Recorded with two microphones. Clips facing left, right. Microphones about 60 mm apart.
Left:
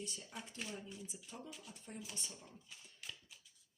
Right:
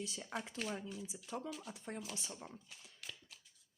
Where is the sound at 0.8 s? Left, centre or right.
Right.